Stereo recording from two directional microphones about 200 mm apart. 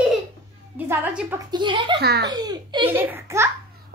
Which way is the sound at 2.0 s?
55° right (ahead or behind).